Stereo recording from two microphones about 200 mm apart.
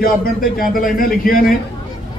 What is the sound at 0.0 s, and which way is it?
A man's voice, 45° left (ahead or behind).